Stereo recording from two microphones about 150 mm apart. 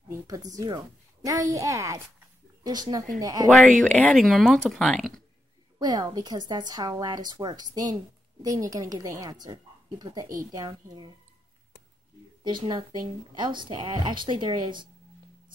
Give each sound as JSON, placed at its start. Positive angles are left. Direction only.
{"t": 0.3, "sound": "speech", "side_deg": -25}
{"t": 3.8, "sound": "speech", "side_deg": 5}
{"t": 5.8, "sound": "speech", "side_deg": -30}
{"t": 12.4, "sound": "speech", "side_deg": -30}